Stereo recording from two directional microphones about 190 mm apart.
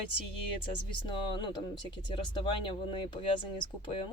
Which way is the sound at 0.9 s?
25° left (ahead or behind).